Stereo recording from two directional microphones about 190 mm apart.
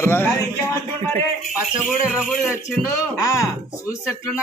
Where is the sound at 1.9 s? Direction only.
5° right (ahead or behind).